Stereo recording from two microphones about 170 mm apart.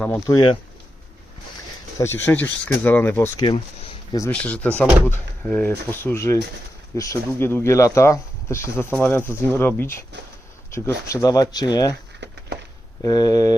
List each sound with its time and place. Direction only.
0.3 s speech: 25° left (ahead or behind)
2.0 s speech: 15° left (ahead or behind)
13.0 s speech: 20° left (ahead or behind)